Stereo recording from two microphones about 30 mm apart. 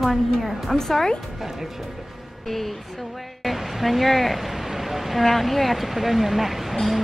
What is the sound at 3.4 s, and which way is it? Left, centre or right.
Speech, centre.